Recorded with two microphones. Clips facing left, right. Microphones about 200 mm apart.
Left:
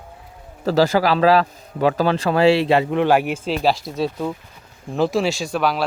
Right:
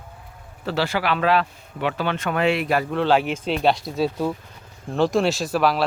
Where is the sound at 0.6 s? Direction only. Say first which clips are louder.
Left 7 dB; 40° left (ahead or behind).